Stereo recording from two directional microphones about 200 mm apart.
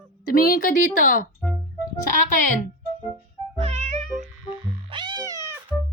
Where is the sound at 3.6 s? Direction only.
35° right (ahead or behind).